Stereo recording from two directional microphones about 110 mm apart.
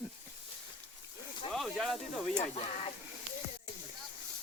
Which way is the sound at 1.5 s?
5° left (ahead or behind).